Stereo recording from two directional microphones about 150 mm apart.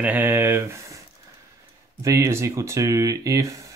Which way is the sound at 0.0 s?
10° right (ahead or behind).